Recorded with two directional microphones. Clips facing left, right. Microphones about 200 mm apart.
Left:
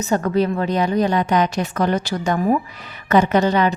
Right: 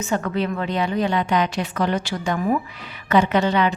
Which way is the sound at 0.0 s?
40° left (ahead or behind).